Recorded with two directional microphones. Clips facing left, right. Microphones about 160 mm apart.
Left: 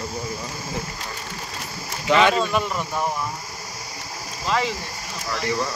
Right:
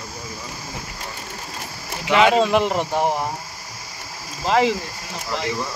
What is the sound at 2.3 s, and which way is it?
Speech, 90° right.